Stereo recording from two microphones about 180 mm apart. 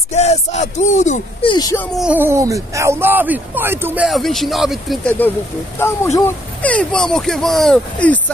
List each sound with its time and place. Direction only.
0.1 s speech: 40° left (ahead or behind)
1.4 s speech: 25° left (ahead or behind)
2.0 s speech: 10° right (ahead or behind)
5.8 s speech: 15° left (ahead or behind)